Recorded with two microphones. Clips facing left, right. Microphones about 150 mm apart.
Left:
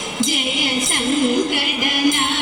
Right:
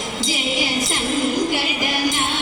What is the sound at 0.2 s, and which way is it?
Music, 55° left (ahead or behind).